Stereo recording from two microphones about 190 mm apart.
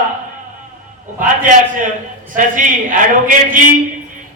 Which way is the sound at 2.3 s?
45° right (ahead or behind).